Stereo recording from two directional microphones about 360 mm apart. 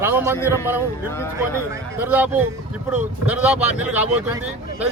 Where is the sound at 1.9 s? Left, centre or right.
Centre.